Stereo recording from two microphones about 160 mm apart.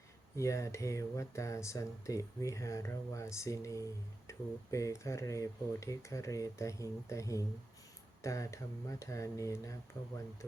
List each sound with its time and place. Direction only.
0.3 s speech: 20° left (ahead or behind)